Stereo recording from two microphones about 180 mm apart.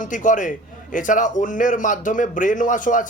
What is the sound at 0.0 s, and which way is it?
A man's voice, 45° left (ahead or behind).